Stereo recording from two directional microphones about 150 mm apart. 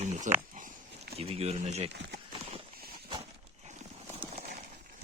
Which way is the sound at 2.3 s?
40° right (ahead or behind).